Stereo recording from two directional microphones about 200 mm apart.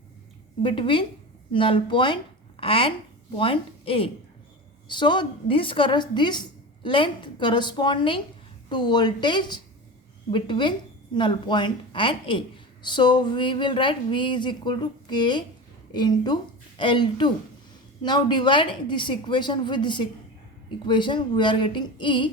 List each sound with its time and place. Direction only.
0.6 s a woman's voice: 25° left (ahead or behind)